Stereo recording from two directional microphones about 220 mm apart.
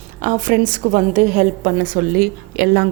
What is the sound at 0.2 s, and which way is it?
A woman's voice, 35° right (ahead or behind).